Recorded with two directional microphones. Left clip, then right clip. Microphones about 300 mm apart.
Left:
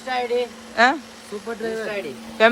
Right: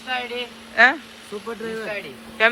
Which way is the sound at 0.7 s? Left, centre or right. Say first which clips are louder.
Right 2 dB; centre.